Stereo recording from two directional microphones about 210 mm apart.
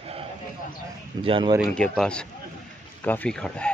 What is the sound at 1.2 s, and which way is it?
Speech, 25° right (ahead or behind).